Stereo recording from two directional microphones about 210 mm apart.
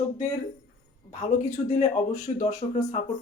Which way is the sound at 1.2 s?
35° left (ahead or behind).